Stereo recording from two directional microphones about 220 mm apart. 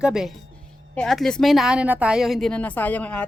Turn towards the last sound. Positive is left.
turn(degrees=5)  # may be behind; listen again after turning